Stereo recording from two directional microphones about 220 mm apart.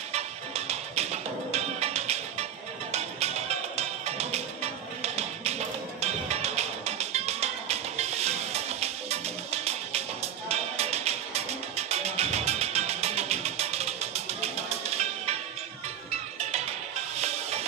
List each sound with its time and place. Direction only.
0.1 s music: 30° right (ahead or behind)
17.2 s music: 30° right (ahead or behind)